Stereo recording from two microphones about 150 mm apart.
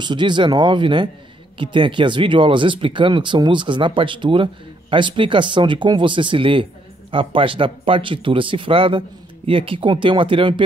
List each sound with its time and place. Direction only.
0.0 s speech: 30° right (ahead or behind)